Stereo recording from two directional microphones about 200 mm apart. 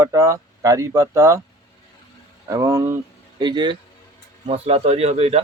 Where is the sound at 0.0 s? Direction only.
15° right (ahead or behind).